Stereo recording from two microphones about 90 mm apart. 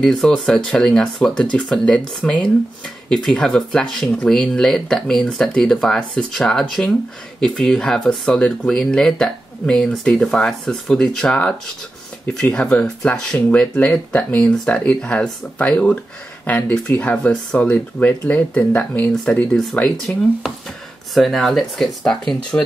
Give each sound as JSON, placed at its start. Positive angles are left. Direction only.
{"t": 0.0, "sound": "speech", "side_deg": 5}
{"t": 12.5, "sound": "speech", "side_deg": 10}
{"t": 21.1, "sound": "speech", "side_deg": 0}